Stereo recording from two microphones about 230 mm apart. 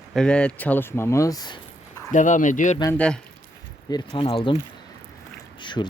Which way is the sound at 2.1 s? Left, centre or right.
Left.